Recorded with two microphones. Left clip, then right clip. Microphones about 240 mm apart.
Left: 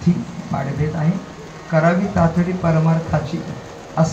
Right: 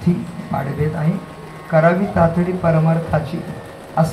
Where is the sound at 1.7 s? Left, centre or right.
Right.